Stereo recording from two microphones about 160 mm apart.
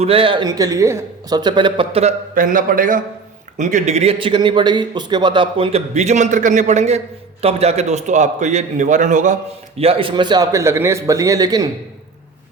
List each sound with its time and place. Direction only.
0.0 s speech: 35° right (ahead or behind)
2.3 s a man's voice: 55° right (ahead or behind); by 11.7 s 25° right (ahead or behind)